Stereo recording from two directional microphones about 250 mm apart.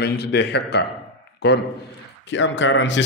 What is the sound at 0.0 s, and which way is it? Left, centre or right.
A man's voice, left.